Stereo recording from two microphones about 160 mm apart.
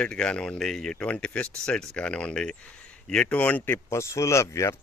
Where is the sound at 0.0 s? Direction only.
5° left (ahead or behind).